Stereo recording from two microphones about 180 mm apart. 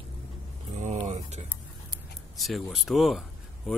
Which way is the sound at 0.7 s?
40° right (ahead or behind).